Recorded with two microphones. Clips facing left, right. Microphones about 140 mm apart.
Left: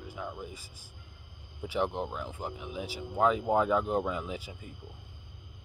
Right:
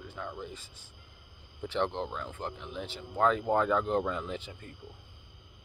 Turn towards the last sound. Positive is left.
turn(degrees=5)  # may be behind; listen again after turning